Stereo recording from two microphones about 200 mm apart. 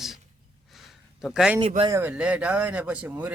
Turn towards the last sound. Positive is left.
turn(degrees=-5)  # may be behind; listen again after turning